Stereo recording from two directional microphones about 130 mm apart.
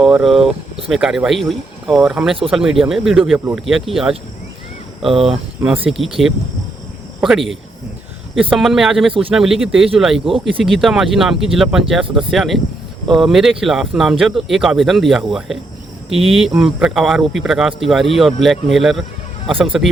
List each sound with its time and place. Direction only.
0.0 s speech: centre (ahead or behind)
5.2 s speech: 5° right (ahead or behind)
7.2 s speech: centre (ahead or behind)
19.5 s speech: 45° right (ahead or behind)